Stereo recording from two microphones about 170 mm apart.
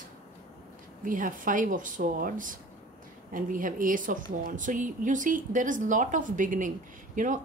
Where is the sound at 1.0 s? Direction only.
50° right (ahead or behind).